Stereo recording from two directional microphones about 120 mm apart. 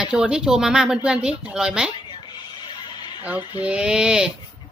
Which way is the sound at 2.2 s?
40° left (ahead or behind).